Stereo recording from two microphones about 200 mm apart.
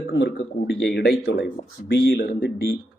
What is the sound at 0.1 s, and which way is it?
Speech, 60° left (ahead or behind).